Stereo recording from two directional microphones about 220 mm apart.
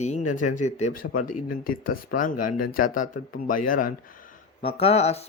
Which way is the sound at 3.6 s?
35° left (ahead or behind).